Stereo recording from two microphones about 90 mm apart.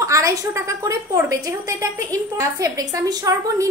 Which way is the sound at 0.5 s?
30° right (ahead or behind).